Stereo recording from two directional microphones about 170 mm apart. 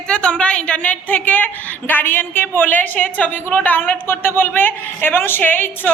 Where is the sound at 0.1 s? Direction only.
5° left (ahead or behind).